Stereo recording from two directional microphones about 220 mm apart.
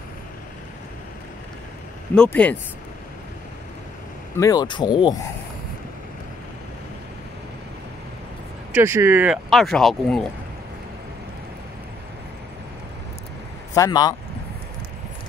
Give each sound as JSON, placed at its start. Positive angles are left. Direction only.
{"t": 2.1, "sound": "speech", "side_deg": 5}
{"t": 4.4, "sound": "speech", "side_deg": 15}
{"t": 8.7, "sound": "speech", "side_deg": -10}
{"t": 13.7, "sound": "speech", "side_deg": 15}